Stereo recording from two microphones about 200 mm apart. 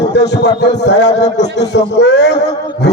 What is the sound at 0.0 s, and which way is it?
Speech, 55° left (ahead or behind).